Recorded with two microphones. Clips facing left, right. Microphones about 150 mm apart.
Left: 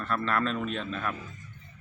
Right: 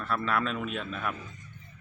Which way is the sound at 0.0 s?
5° right (ahead or behind).